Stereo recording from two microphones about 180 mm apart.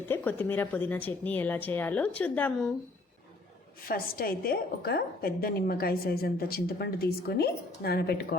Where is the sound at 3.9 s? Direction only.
55° left (ahead or behind).